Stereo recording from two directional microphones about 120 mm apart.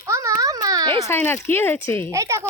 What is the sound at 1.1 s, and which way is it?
Speech, 20° left (ahead or behind).